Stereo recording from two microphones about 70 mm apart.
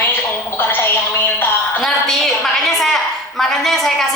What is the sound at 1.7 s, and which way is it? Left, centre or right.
A woman's voice, centre.